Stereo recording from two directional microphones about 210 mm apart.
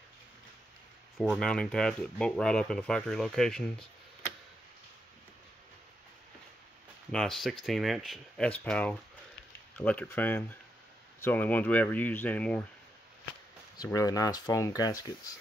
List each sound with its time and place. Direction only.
1.1 s speech: centre (ahead or behind)
7.1 s speech: centre (ahead or behind)
13.7 s speech: 15° left (ahead or behind)